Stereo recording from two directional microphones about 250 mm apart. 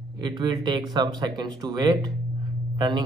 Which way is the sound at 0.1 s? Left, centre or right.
Centre.